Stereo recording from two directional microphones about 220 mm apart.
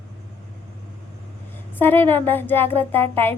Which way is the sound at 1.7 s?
10° left (ahead or behind).